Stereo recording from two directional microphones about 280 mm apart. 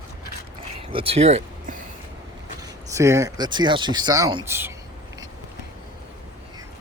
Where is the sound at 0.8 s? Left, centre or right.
Centre.